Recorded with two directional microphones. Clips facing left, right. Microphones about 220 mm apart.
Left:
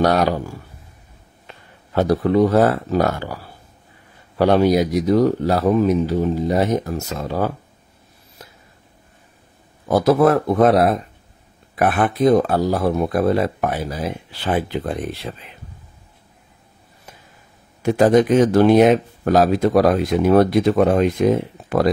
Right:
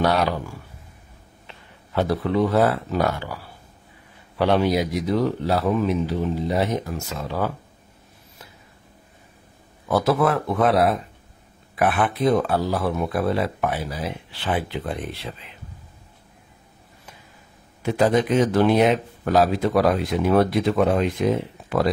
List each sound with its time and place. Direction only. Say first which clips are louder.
0.0 s speech: left 4 dB; 40° left (ahead or behind)
2.0 s speech: left 5 dB; 40° left (ahead or behind)
4.4 s speech: left 5 dB; 40° left (ahead or behind)
9.8 s speech: left 5 dB; 40° left (ahead or behind)
17.8 s speech: left 5 dB; 45° left (ahead or behind)